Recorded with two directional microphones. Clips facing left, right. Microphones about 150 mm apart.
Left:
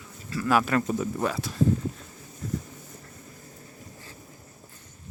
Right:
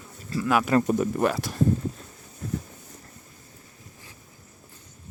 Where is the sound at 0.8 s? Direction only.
65° right (ahead or behind).